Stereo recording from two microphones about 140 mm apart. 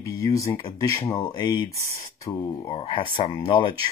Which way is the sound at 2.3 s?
15° left (ahead or behind).